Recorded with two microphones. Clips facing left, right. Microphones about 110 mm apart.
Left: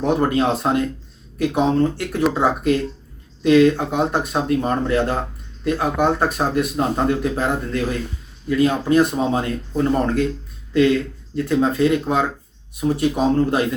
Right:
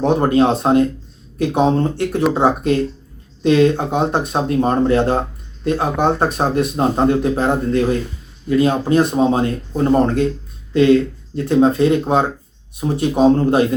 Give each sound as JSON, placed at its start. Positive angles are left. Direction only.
{"t": 0.0, "sound": "speech", "side_deg": -25}